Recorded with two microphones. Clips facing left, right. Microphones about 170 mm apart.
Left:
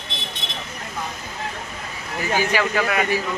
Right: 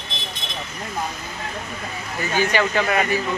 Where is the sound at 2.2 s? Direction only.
10° left (ahead or behind).